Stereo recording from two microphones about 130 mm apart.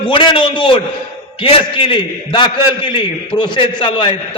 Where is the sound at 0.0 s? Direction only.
40° left (ahead or behind).